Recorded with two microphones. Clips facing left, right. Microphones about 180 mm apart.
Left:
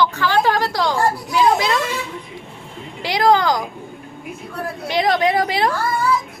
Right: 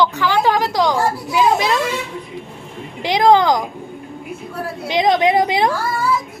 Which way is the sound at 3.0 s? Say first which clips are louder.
Right 3 dB; 20° right (ahead or behind).